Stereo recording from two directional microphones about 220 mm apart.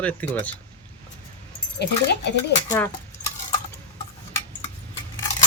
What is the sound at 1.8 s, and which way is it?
Speech, 50° left (ahead or behind).